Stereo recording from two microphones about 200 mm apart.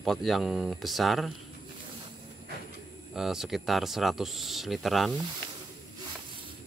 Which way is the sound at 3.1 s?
Centre (ahead or behind).